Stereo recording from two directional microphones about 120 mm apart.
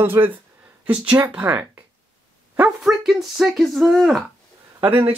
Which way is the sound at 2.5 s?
5° right (ahead or behind).